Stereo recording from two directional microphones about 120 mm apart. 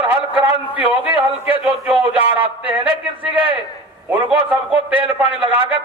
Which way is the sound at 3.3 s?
45° right (ahead or behind).